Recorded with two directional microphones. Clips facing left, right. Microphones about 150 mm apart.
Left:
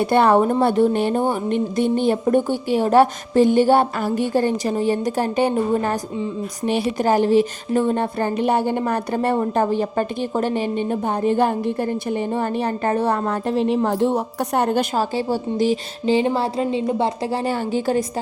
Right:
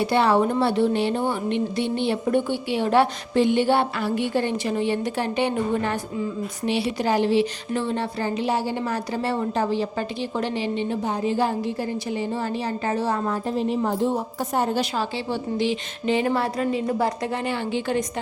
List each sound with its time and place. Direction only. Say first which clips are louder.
0.0 s a woman's voice: left 4 dB; 50° left (ahead or behind)